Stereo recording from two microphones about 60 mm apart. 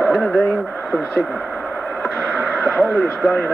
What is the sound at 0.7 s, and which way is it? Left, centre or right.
Radio, left.